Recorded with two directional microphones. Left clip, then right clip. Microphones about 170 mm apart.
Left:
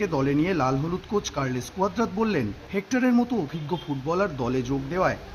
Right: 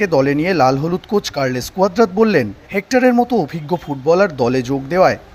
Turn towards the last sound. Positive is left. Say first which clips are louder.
# right 11 dB
turn(degrees=-35)  # may be behind; listen again after turning